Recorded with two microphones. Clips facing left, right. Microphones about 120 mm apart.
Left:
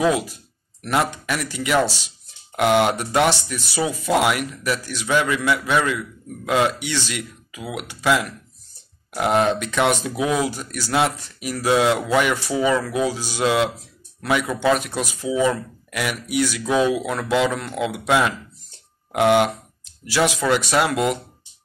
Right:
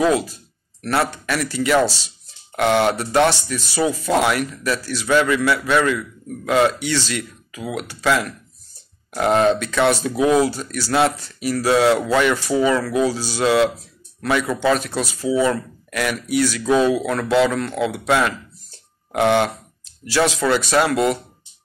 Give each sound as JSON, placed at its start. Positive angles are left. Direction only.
{"t": 0.0, "sound": "speech", "side_deg": 15}